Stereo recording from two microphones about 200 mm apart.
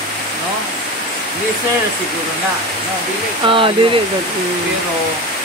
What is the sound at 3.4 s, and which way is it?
Speech, 25° right (ahead or behind).